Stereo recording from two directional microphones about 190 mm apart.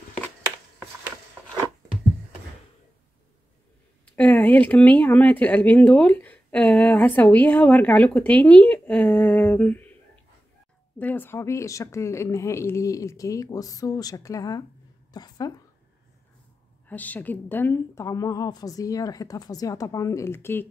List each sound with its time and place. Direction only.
4.0 s speech: 5° left (ahead or behind)
11.0 s speech: 10° left (ahead or behind)
16.8 s speech: 10° left (ahead or behind)